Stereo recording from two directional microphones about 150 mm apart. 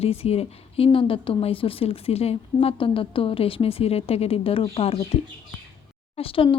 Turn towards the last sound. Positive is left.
turn(degrees=35)  # may be behind; listen again after turning